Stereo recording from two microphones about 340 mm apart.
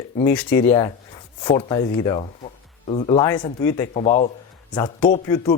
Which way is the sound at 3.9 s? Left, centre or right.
Centre.